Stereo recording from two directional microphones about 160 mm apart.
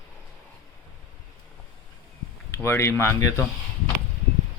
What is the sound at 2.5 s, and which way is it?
Speech, 15° left (ahead or behind).